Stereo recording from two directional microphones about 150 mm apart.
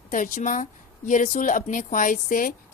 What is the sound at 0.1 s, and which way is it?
A woman's voice, 60° left (ahead or behind).